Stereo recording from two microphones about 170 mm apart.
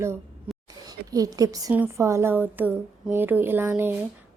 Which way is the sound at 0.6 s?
20° right (ahead or behind).